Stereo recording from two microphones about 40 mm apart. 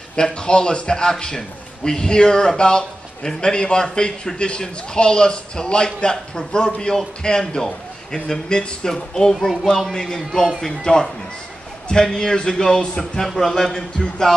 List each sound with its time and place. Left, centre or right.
0.1 s a man's voice: left
13.2 s a man's voice: centre